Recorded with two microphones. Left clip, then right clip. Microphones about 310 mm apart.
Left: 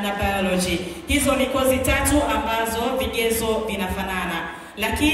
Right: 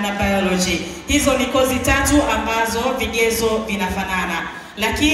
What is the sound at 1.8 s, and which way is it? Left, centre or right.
Music, right.